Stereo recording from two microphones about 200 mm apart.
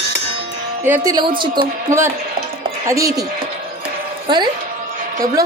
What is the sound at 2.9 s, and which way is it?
Speech, 15° right (ahead or behind).